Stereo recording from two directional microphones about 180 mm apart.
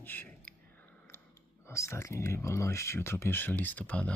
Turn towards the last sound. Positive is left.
turn(degrees=10)  # may be behind; listen again after turning